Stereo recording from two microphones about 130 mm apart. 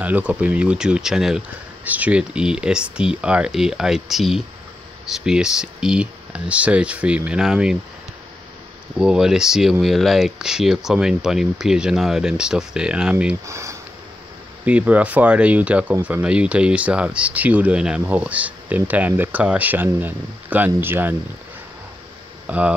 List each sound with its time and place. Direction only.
0.0 s speech: 10° right (ahead or behind)
8.9 s speech: 5° right (ahead or behind)
13.5 s speech: 25° right (ahead or behind)
14.6 s speech: 10° right (ahead or behind)
22.5 s speech: 10° right (ahead or behind)